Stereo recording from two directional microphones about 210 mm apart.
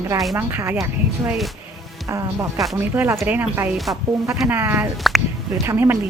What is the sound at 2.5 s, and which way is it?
Speech, centre (ahead or behind).